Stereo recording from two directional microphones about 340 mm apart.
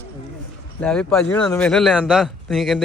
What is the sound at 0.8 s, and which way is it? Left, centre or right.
A man's voice, centre.